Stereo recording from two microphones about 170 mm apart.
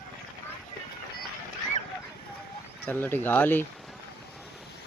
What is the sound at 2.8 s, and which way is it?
Speech, 10° left (ahead or behind).